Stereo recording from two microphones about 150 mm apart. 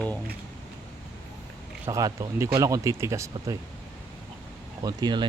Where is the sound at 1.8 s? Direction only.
20° right (ahead or behind).